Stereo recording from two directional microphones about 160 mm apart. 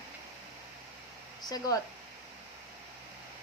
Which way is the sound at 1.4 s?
25° left (ahead or behind).